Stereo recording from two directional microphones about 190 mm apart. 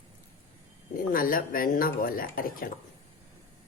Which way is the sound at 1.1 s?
50° left (ahead or behind).